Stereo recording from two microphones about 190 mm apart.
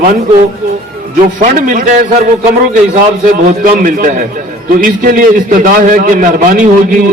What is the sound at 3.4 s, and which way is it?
A man's voice, 45° right (ahead or behind).